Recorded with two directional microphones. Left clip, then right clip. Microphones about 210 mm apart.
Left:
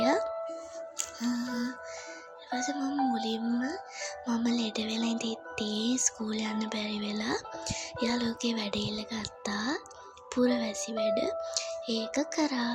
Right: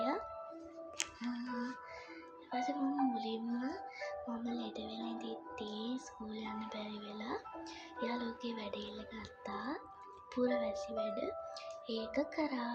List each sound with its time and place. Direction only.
1.3 s music: 25° left (ahead or behind)
10.8 s speech: 25° left (ahead or behind)